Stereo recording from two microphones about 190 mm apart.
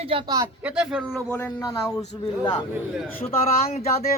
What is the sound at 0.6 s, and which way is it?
Speech, 5° right (ahead or behind).